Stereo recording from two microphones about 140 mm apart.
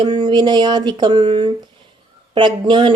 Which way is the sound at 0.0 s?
35° right (ahead or behind).